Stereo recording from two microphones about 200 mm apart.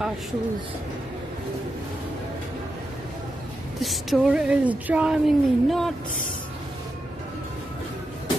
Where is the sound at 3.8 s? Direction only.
Centre (ahead or behind).